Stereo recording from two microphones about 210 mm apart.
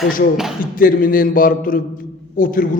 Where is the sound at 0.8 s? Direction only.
40° left (ahead or behind).